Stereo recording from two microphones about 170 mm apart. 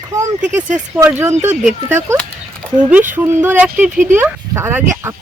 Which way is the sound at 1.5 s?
45° right (ahead or behind).